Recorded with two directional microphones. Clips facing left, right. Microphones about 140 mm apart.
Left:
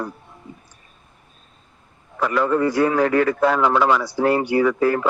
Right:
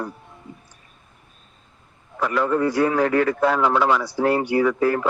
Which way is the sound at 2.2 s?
90° left.